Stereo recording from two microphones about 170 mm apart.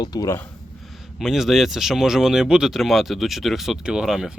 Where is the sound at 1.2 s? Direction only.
Centre (ahead or behind).